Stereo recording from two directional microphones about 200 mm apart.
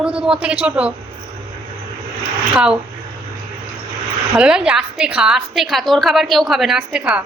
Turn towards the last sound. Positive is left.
turn(degrees=-5)  # may be behind; listen again after turning